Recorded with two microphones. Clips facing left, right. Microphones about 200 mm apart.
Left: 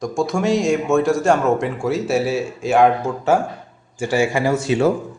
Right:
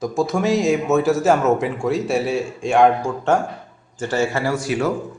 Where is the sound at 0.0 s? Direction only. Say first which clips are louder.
Even; centre (ahead or behind).